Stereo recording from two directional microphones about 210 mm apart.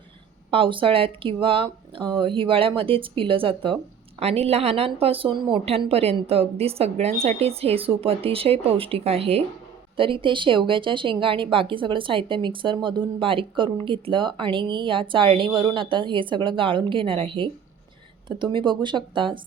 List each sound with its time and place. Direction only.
0.5 s a woman's voice: 25° right (ahead or behind)